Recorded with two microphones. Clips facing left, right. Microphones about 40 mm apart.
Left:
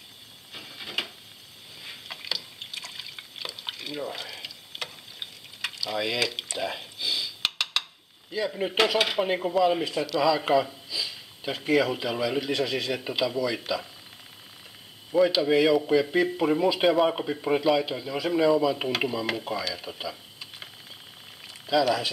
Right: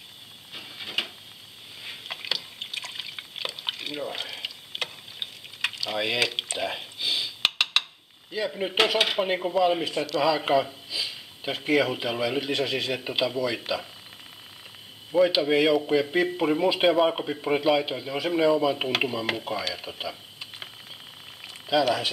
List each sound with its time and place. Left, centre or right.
0.5 s printer: centre
1.8 s drip: right
4.1 s a sound: right
8.5 s a man's voice: centre
15.0 s a man's voice: centre
16.6 s speech: right
16.9 s a man's voice: centre